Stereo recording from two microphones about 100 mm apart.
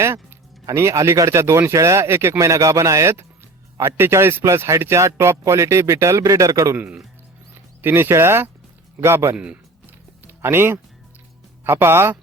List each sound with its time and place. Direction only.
0.6 s a man's voice: 30° right (ahead or behind)
6.7 s speech: 20° right (ahead or behind)
9.3 s music: 10° right (ahead or behind)
11.6 s speech: 20° right (ahead or behind)